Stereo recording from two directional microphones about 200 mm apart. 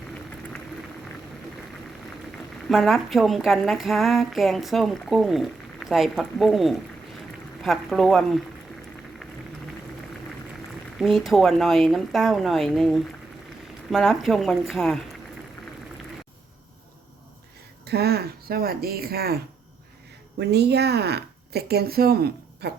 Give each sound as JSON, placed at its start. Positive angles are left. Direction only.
{"t": 2.6, "sound": "a woman's voice", "side_deg": 0}
{"t": 11.0, "sound": "a woman's voice", "side_deg": 0}
{"t": 17.8, "sound": "speech", "side_deg": -55}
{"t": 20.4, "sound": "speech", "side_deg": -55}